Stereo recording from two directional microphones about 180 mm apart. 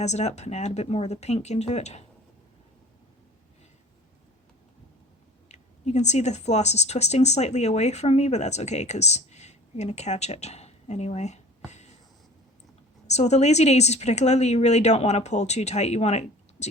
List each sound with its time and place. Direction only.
0.0 s a woman's voice: 40° left (ahead or behind)
5.5 s speech: 40° left (ahead or behind)
13.1 s a woman's voice: 40° left (ahead or behind)